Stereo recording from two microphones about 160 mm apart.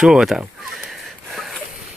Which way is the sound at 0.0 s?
5° right (ahead or behind).